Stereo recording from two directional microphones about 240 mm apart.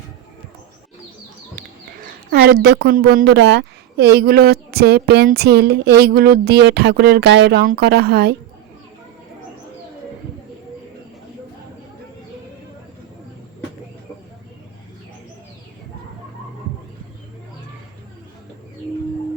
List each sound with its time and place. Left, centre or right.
2.0 s speech: right